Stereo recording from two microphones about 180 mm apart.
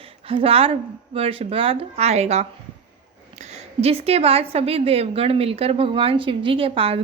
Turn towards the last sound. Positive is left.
turn(degrees=-30)  # may be behind; listen again after turning